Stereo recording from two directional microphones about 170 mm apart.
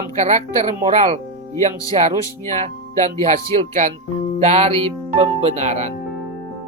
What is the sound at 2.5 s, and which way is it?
Speech, 45° right (ahead or behind).